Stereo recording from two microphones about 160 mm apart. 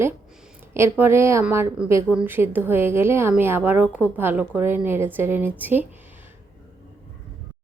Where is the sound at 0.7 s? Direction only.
15° right (ahead or behind).